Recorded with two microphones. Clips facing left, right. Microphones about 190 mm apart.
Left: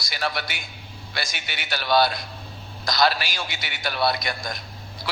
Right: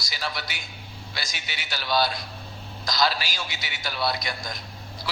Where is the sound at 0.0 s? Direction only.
60° left (ahead or behind).